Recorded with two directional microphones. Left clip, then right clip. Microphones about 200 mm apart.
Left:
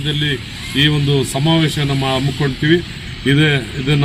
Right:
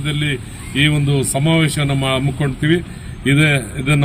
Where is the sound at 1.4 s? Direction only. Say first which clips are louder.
Left 1 dB; 15° right (ahead or behind).